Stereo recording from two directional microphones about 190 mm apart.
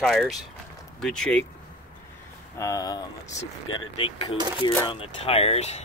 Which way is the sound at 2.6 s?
20° left (ahead or behind).